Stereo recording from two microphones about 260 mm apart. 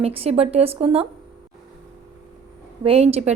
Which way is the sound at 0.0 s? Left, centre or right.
Right.